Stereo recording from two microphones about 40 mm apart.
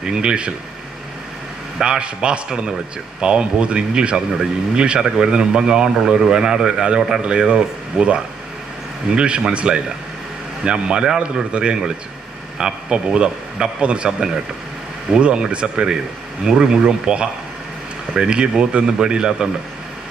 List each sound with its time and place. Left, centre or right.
0.0 s speech: right
1.8 s speech: right